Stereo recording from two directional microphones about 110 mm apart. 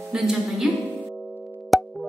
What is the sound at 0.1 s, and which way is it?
Speech, centre (ahead or behind).